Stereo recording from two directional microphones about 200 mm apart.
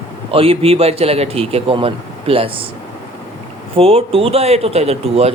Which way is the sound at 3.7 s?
30° right (ahead or behind).